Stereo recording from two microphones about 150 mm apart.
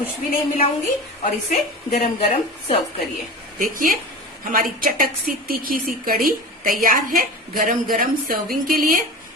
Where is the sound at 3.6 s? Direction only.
70° right (ahead or behind).